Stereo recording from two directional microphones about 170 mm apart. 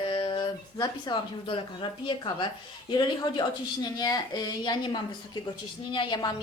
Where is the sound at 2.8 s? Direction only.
25° left (ahead or behind).